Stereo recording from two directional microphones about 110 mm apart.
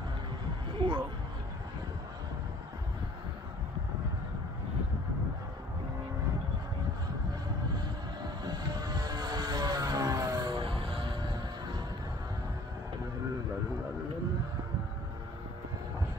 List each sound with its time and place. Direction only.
0.7 s a sound: 45° right (ahead or behind)
7.7 s vehicle: 40° right (ahead or behind)
11.0 s music: 50° right (ahead or behind)